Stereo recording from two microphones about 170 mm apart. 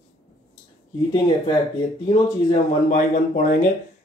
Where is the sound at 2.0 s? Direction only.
45° left (ahead or behind).